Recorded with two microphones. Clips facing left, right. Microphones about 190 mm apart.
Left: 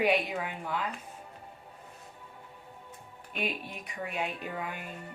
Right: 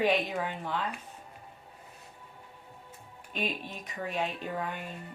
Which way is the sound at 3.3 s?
10° left (ahead or behind).